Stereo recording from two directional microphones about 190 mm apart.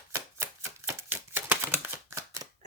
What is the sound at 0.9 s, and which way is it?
Typewriter, 10° right (ahead or behind).